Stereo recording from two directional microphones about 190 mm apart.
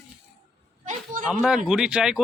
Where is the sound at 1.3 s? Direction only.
Centre (ahead or behind).